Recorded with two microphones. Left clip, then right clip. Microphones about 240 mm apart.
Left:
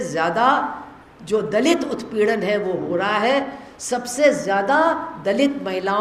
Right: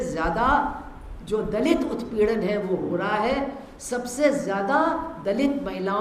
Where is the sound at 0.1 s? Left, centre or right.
Centre.